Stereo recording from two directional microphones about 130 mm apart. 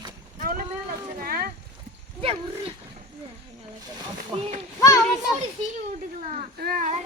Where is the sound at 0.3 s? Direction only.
90° right.